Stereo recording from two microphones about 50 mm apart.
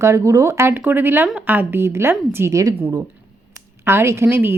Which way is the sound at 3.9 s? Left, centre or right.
Right.